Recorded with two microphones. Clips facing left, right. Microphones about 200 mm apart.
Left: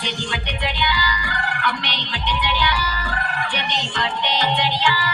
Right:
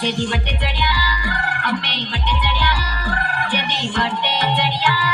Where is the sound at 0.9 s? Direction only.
50° right (ahead or behind).